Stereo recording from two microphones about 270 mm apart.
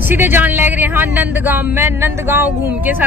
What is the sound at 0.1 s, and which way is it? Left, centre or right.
Speech, centre.